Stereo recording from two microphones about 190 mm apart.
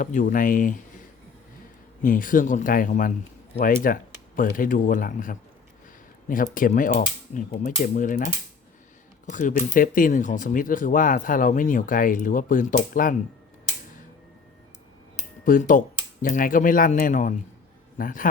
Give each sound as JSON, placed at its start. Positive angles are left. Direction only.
{"t": 0.0, "sound": "speech", "side_deg": 45}
{"t": 2.0, "sound": "speech", "side_deg": 45}
{"t": 9.3, "sound": "speech", "side_deg": 45}
{"t": 15.4, "sound": "a man's voice", "side_deg": 45}